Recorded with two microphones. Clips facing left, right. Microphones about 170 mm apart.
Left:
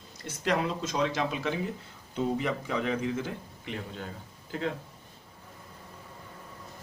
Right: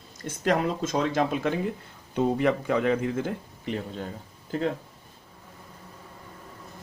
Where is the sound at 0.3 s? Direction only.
50° right (ahead or behind).